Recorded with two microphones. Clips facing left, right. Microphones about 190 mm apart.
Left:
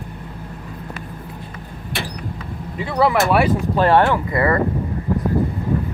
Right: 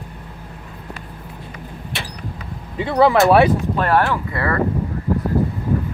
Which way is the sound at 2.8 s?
25° right (ahead or behind).